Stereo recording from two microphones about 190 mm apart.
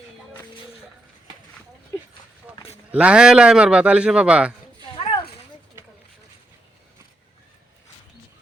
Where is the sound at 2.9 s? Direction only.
5° right (ahead or behind).